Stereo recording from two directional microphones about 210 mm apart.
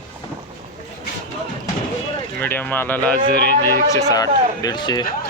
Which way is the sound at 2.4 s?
10° left (ahead or behind).